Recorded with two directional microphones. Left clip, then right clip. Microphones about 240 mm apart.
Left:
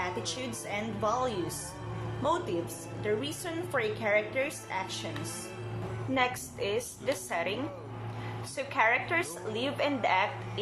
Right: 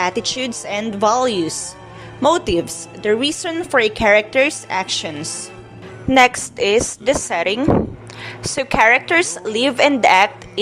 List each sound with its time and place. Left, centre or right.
0.0 s a woman's voice: right
6.1 s a woman's voice: right